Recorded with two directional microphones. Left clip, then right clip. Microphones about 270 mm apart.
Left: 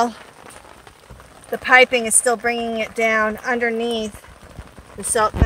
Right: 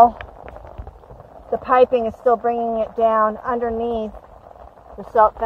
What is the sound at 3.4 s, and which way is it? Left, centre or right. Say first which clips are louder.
Speech: left 2 dB; left.